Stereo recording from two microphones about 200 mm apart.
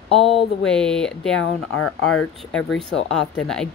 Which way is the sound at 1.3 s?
90° left.